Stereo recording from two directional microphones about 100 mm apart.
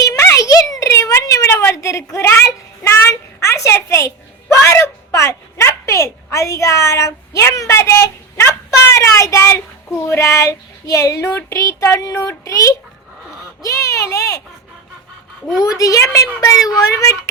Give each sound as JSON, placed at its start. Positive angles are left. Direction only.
{"t": 0.0, "sound": "a sound", "side_deg": 35}
{"t": 10.0, "sound": "speech", "side_deg": 30}
{"t": 15.4, "sound": "a child's voice", "side_deg": -5}
{"t": 15.8, "sound": "speech", "side_deg": 35}